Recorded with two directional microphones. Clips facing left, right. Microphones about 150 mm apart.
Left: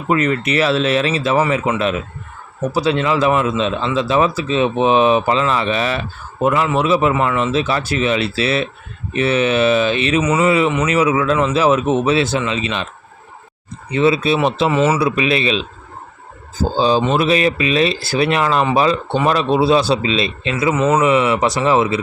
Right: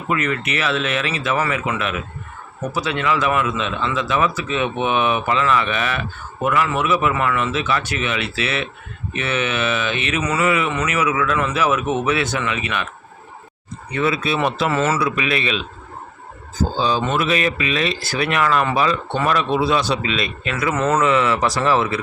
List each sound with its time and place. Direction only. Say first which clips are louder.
0.1 s speech: left 5 dB; 30° left (ahead or behind)
13.9 s speech: left 6 dB; 25° left (ahead or behind)
15.0 s speech: left 5 dB; 30° left (ahead or behind)
20.7 s speech: left 3 dB; 10° left (ahead or behind)